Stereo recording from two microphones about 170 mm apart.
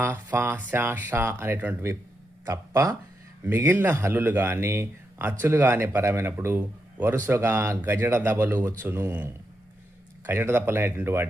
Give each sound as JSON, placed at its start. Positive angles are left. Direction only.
{"t": 0.0, "sound": "a man's voice", "side_deg": -10}